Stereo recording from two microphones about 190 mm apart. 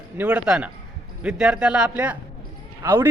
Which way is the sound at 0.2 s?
5° right (ahead or behind).